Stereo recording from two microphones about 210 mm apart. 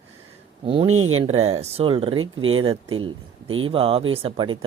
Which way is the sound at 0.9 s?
85° right.